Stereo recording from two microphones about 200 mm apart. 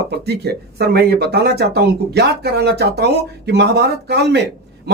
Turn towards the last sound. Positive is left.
turn(degrees=-55)  # may be behind; listen again after turning